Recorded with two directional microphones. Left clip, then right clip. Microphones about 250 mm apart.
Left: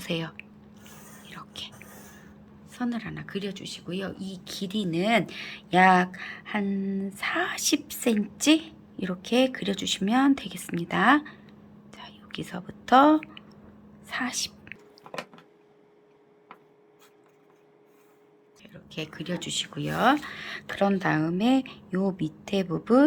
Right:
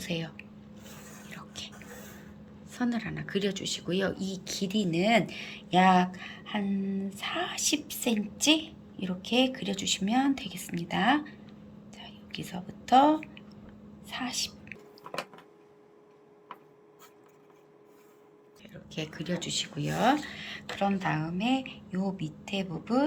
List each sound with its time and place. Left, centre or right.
0.0 s a sound: centre
1.3 s whispering: centre
2.7 s a woman's voice: centre
18.6 s speech: centre; by 23.0 s left